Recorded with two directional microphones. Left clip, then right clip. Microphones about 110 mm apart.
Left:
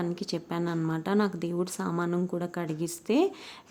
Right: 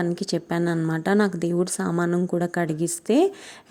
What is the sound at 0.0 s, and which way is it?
A woman's voice, 45° right (ahead or behind).